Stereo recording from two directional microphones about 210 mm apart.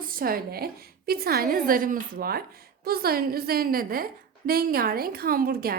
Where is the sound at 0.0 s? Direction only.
45° right (ahead or behind).